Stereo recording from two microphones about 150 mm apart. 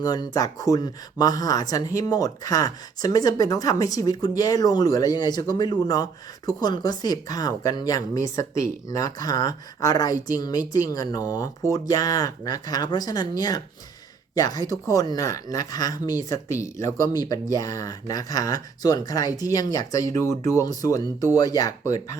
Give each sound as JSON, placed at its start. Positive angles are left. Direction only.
{"t": 0.0, "sound": "speech", "side_deg": 25}